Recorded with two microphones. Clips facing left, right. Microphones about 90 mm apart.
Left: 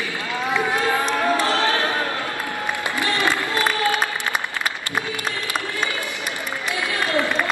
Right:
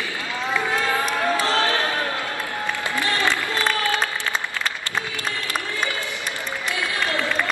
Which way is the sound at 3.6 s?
15° left (ahead or behind).